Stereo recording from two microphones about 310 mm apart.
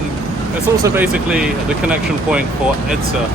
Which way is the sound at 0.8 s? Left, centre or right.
Centre.